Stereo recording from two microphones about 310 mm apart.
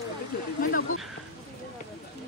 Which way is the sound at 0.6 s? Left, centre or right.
Left.